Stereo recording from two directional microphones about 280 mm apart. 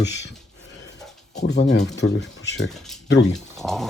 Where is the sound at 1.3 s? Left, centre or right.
Left.